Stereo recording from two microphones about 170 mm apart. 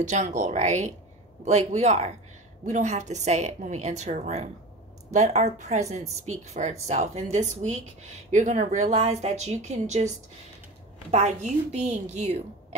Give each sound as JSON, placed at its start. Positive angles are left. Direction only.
{"t": 0.0, "sound": "a woman's voice", "side_deg": -45}